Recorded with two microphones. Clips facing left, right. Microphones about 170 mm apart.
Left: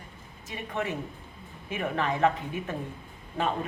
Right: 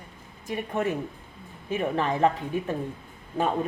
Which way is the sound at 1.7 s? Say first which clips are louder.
Right 3 dB; 35° right (ahead or behind).